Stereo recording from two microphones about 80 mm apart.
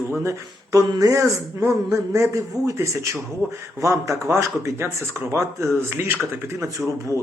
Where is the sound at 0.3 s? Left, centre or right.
Right.